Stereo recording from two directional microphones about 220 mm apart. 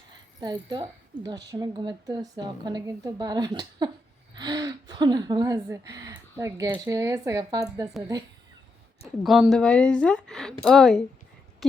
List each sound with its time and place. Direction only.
0.3 s a woman's voice: 20° right (ahead or behind)
9.2 s speech: centre (ahead or behind)